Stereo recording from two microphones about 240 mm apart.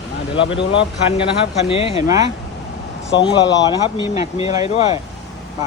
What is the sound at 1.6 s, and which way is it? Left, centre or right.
Speech, left.